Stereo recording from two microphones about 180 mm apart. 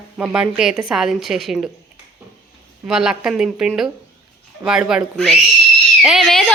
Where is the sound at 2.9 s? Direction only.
5° right (ahead or behind).